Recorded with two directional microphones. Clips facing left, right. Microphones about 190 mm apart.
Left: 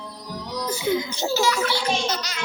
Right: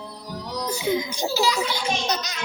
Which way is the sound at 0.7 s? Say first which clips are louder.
Left 1 dB; 20° right (ahead or behind).